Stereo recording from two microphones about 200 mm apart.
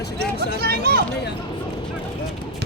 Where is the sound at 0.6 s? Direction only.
50° right (ahead or behind).